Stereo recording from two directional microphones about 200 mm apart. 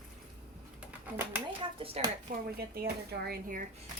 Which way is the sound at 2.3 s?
45° right (ahead or behind).